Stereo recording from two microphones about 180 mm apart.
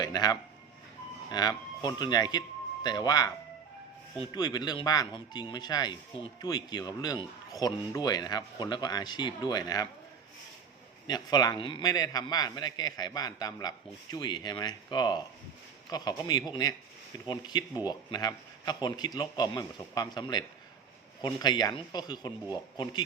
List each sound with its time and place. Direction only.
0.0 s a sound: 20° left (ahead or behind)
1.3 s speech: 25° left (ahead or behind)
11.0 s speech: 25° left (ahead or behind)